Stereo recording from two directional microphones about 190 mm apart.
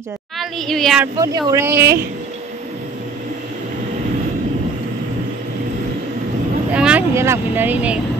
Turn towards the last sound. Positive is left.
turn(degrees=-5)  # may be behind; listen again after turning